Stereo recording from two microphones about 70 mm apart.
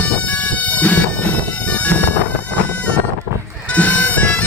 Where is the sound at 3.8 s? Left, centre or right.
Left.